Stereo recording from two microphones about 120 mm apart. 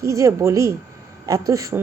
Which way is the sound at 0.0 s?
25° right (ahead or behind).